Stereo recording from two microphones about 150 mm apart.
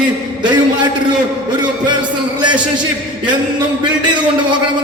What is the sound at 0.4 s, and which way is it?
Speech, 30° right (ahead or behind).